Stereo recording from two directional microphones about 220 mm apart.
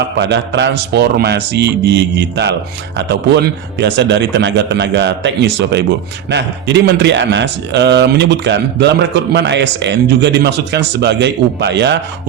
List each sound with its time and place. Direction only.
0.2 s a man's voice: 50° right (ahead or behind)